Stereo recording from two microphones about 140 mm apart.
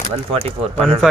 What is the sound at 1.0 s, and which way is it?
Speech, centre (ahead or behind).